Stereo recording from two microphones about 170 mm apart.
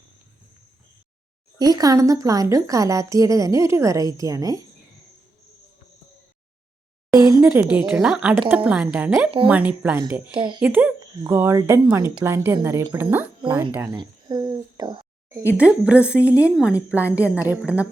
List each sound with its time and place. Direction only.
1.5 s speech: 20° right (ahead or behind)
7.1 s speech: 20° right (ahead or behind)
10.3 s speech: 25° right (ahead or behind)
10.6 s speech: 10° right (ahead or behind)
13.9 s a sound: 25° right (ahead or behind)
15.5 s speech: 5° right (ahead or behind)